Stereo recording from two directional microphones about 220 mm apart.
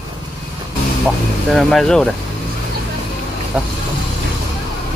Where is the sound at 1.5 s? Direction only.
Centre (ahead or behind).